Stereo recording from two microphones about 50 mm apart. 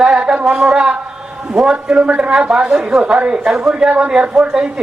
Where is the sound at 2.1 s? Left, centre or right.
Right.